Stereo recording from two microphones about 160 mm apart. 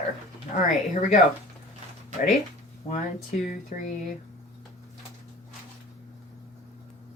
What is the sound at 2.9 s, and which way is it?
Speech, 45° left (ahead or behind).